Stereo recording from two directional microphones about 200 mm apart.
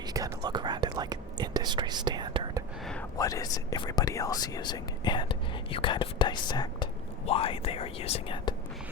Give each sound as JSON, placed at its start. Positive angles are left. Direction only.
{"t": 0.1, "sound": "whispering", "side_deg": -20}
{"t": 2.8, "sound": "a sound", "side_deg": 5}
{"t": 3.2, "sound": "speech", "side_deg": 15}